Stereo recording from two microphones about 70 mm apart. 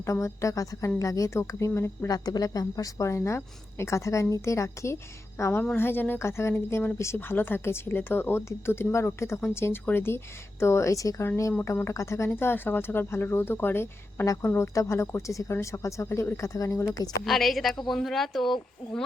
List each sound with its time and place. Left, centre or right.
0.0 s a woman's voice: left
2.0 s a woman's voice: left
5.4 s a woman's voice: left
11.6 s speech: left
14.8 s a woman's voice: left
16.9 s a woman's voice: left
17.2 s speech: centre